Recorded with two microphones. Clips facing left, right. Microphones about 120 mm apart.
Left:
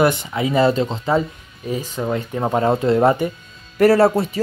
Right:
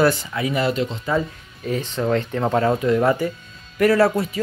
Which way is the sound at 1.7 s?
10° left (ahead or behind).